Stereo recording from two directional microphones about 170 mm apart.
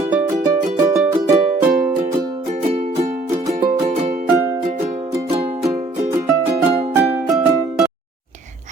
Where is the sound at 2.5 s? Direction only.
45° right (ahead or behind).